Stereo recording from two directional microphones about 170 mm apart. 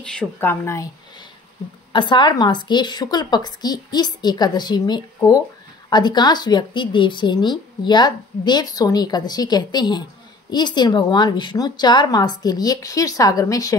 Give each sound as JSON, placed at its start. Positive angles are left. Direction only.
{"t": 0.0, "sound": "speech", "side_deg": 5}
{"t": 1.9, "sound": "a woman's voice", "side_deg": 25}